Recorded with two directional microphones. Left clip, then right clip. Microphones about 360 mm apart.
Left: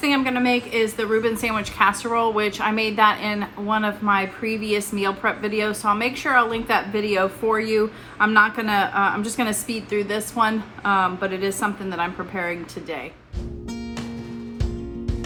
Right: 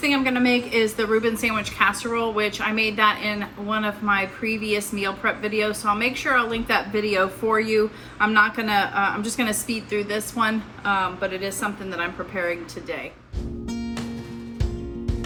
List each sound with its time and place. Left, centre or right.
0.0 s a woman's voice: centre
13.7 s music: centre